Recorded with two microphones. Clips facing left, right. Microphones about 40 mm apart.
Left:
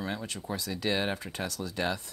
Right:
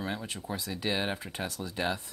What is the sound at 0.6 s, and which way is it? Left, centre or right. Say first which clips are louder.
Speech: left 2 dB; centre.